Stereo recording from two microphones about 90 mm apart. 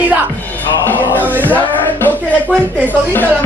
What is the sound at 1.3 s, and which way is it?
Music, 20° left (ahead or behind).